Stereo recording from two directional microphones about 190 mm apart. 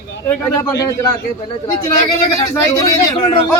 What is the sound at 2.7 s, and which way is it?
Speech, 25° left (ahead or behind).